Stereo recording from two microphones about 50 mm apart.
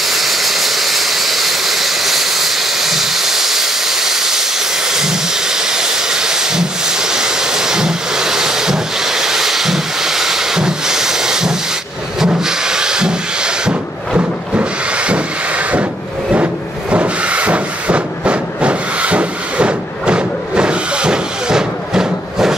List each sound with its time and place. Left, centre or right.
0.0 s vehicle: centre
12.4 s a sound: centre
16.9 s train: right